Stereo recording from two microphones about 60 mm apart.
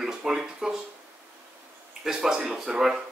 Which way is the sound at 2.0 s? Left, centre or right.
Centre.